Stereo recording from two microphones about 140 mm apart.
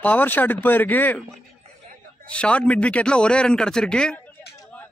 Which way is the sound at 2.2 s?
10° left (ahead or behind).